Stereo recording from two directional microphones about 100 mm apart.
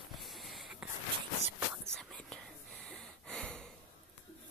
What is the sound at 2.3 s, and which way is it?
Gasp, 5° left (ahead or behind).